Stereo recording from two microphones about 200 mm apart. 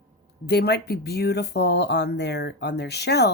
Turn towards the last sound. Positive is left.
turn(degrees=55)  # may be behind; listen again after turning